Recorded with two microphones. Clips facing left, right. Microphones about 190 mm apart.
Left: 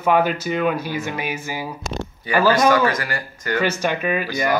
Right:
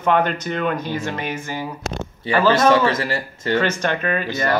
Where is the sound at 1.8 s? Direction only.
90° right.